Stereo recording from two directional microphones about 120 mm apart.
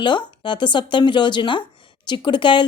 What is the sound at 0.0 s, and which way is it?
A woman's voice, 40° left (ahead or behind).